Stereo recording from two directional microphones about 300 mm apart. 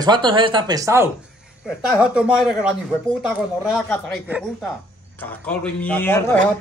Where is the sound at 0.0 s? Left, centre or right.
Centre.